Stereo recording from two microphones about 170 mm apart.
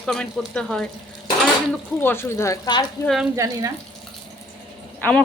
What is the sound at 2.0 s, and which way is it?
Speech, 15° left (ahead or behind).